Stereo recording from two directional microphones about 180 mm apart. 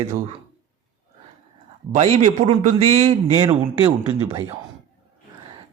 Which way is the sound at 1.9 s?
40° right (ahead or behind).